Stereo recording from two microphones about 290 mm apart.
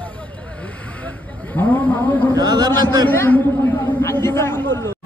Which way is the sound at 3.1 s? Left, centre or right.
Centre.